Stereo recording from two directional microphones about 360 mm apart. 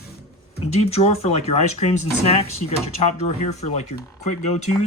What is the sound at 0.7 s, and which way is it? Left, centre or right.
Speech, centre.